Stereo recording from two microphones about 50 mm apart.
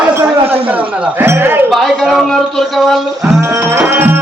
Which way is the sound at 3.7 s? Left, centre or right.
Right.